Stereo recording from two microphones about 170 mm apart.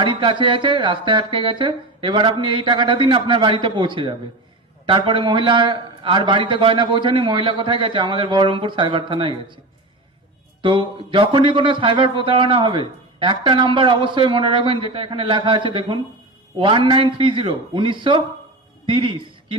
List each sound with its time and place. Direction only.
0.0 s a man's voice: 30° right (ahead or behind)
10.6 s a man's voice: 30° right (ahead or behind)